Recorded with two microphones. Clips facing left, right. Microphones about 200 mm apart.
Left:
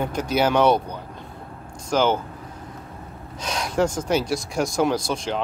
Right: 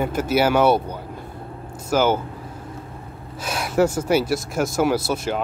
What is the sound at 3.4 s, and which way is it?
Speech, 5° right (ahead or behind).